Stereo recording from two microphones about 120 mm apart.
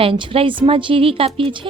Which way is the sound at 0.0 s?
45° right (ahead or behind).